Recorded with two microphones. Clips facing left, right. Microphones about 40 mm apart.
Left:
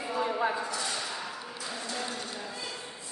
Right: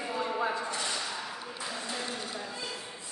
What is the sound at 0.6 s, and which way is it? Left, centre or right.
Speech, right.